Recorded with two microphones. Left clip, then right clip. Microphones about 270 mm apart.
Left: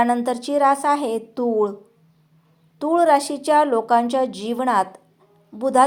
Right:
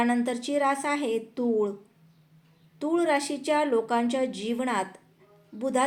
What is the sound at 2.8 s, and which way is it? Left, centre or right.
A woman's voice, centre.